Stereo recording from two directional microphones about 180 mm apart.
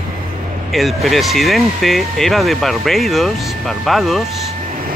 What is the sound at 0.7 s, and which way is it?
Speech, centre (ahead or behind).